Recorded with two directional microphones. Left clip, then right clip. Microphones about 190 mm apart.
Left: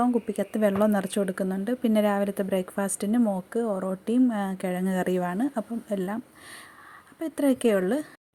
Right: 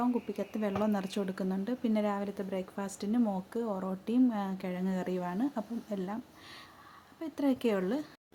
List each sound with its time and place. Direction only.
0.0 s speech: 30° left (ahead or behind)
7.2 s speech: 25° left (ahead or behind)